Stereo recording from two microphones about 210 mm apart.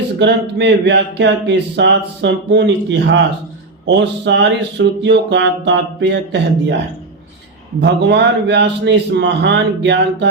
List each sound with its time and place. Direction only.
0.2 s speech: 55° right (ahead or behind)
7.8 s speech: 55° right (ahead or behind)